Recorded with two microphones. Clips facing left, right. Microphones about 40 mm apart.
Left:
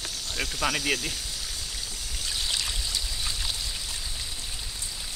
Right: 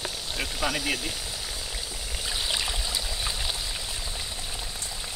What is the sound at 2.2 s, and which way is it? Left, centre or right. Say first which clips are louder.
Trickle: right 1 dB; centre.